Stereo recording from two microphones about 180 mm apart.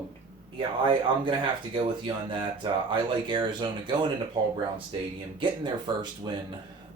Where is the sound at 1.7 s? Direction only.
25° right (ahead or behind).